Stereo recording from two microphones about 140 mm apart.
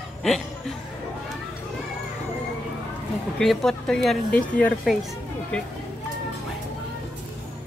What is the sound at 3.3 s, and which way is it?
Speech, centre (ahead or behind).